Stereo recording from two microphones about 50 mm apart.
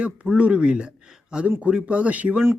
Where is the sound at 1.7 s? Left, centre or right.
Right.